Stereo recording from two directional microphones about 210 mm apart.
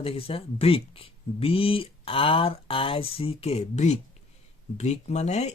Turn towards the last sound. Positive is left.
turn(degrees=30)  # may be behind; listen again after turning